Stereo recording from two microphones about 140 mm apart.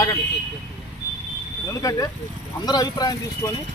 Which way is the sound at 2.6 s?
30° left (ahead or behind).